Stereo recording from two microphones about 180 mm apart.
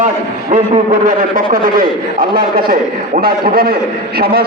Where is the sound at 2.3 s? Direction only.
55° right (ahead or behind).